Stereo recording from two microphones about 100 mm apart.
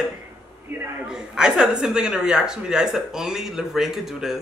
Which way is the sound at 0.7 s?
25° right (ahead or behind).